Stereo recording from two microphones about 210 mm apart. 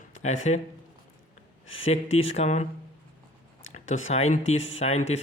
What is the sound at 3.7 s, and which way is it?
Speech, 35° left (ahead or behind).